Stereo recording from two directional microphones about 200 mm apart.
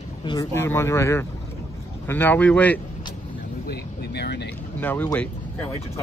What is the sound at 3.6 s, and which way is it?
Speech, 55° left (ahead or behind).